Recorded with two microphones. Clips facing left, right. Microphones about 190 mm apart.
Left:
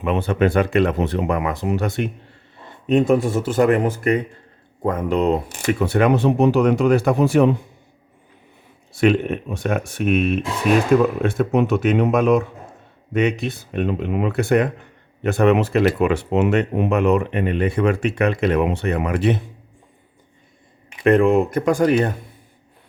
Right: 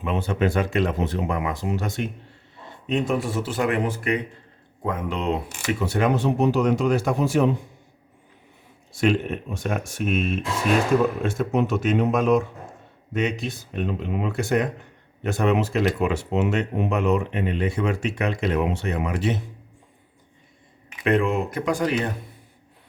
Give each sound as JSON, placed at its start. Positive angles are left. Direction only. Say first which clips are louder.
{"t": 0.0, "sound": "speech", "louder": "left 5 dB", "side_deg": 65}
{"t": 2.8, "sound": "speech", "louder": "left 7 dB", "side_deg": 45}
{"t": 5.6, "sound": "speech", "louder": "left 5 dB", "side_deg": 60}
{"t": 8.9, "sound": "speech", "louder": "left 5 dB", "side_deg": 60}
{"t": 21.0, "sound": "speech", "louder": "left 7 dB", "side_deg": 50}